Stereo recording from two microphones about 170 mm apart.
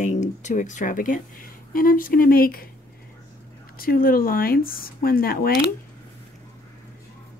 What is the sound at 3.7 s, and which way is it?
Speech, 60° left (ahead or behind).